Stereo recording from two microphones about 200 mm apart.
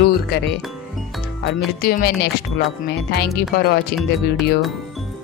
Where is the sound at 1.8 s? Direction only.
50° left (ahead or behind).